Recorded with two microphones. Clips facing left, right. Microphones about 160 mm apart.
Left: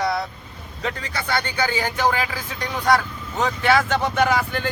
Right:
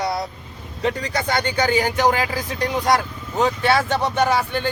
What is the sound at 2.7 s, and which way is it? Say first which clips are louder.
Speech: left 1 dB; 15° right (ahead or behind).